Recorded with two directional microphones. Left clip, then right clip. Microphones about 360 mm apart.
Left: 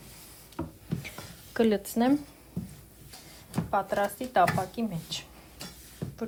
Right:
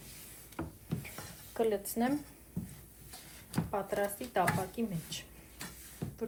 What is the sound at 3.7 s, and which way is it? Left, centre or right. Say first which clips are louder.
A woman's voice: left 7 dB; left.